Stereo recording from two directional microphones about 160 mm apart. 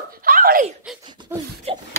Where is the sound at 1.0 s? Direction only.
30° right (ahead or behind).